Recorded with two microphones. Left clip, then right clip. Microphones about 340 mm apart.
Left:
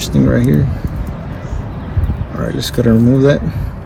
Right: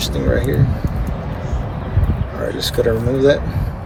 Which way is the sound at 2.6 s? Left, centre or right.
Centre.